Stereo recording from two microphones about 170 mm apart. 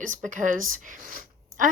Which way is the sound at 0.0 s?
50° right (ahead or behind).